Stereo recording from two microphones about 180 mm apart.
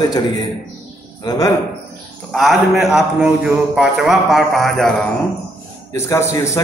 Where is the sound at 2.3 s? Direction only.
Centre (ahead or behind).